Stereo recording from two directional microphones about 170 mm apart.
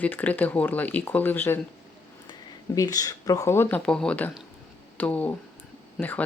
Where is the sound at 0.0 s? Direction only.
10° left (ahead or behind).